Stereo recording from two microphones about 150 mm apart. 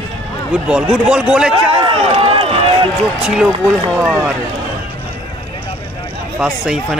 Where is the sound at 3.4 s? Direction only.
10° right (ahead or behind).